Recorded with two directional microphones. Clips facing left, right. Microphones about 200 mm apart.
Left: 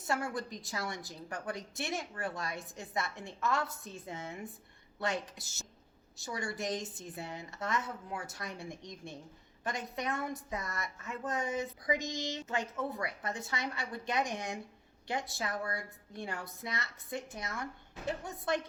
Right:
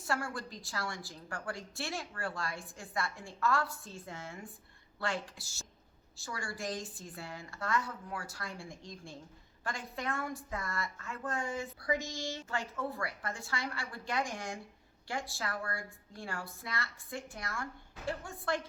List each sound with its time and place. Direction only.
0.0 s a woman's voice: 20° left (ahead or behind)